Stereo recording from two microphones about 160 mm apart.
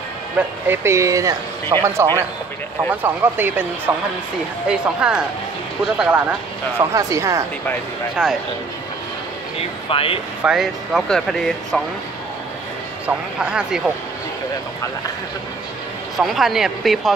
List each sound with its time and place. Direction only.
0.7 s speech: 15° right (ahead or behind)
6.8 s speech: 20° right (ahead or behind)
8.2 s speech: 5° right (ahead or behind)
9.8 s speech: 35° left (ahead or behind)
10.4 s speech: 5° right (ahead or behind)
13.0 s speech: 5° right (ahead or behind)
16.2 s speech: centre (ahead or behind)